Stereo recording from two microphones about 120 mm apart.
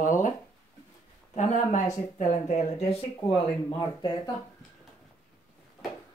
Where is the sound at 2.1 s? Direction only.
75° left (ahead or behind).